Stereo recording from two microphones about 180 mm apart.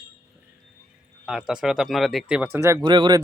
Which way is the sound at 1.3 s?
5° right (ahead or behind).